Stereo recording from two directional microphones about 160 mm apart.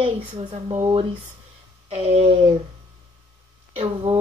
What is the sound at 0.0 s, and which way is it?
Speech, 35° right (ahead or behind).